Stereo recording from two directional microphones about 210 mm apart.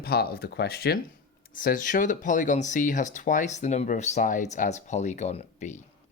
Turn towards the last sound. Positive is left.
turn(degrees=35)  # may be behind; listen again after turning